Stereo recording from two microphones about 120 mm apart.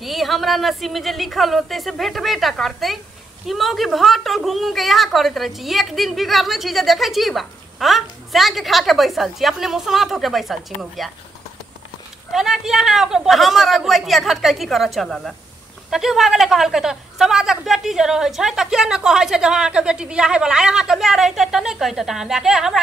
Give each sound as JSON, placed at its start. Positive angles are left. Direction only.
{"t": 0.0, "sound": "a woman's voice", "side_deg": 0}
{"t": 12.3, "sound": "a woman's voice", "side_deg": -5}